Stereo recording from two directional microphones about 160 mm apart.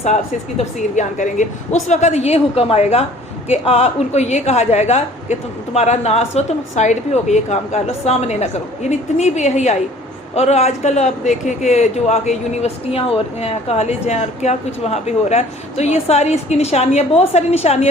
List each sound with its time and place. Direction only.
0.6 s a man's voice: 50° left (ahead or behind)